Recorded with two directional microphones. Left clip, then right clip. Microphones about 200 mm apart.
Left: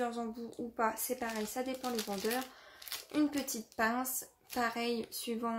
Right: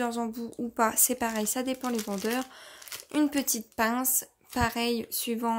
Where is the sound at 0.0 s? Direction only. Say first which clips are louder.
Right 6 dB; 50° right (ahead or behind).